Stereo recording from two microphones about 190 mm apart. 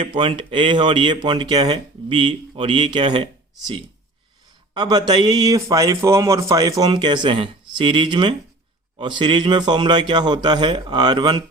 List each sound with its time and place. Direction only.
0.0 s a man's voice: 25° right (ahead or behind)
4.7 s a man's voice: 20° right (ahead or behind)